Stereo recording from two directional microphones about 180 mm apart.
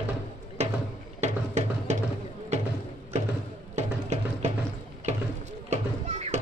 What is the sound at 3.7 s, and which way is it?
Music, 40° right (ahead or behind).